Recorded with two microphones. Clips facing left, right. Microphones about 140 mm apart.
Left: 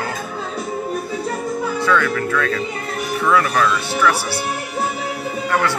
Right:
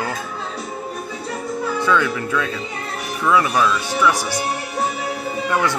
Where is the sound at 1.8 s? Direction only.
15° right (ahead or behind).